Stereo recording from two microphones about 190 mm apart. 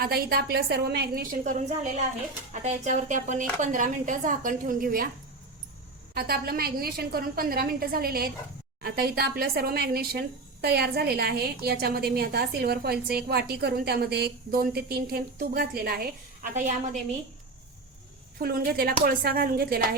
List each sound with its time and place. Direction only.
0.0 s a woman's voice: 55° right (ahead or behind)
6.1 s a woman's voice: 55° right (ahead or behind)
16.6 s a woman's voice: 40° right (ahead or behind)
18.3 s a woman's voice: 50° right (ahead or behind)